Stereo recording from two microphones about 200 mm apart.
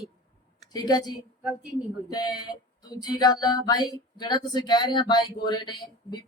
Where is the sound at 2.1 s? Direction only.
20° left (ahead or behind).